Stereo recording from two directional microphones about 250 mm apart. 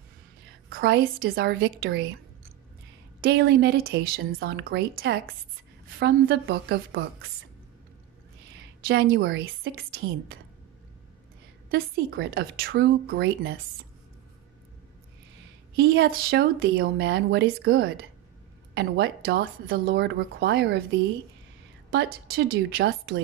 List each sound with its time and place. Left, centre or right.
0.7 s speech: right
3.2 s speech: right
8.8 s speech: right
11.7 s speech: right
15.7 s speech: right
21.9 s speech: right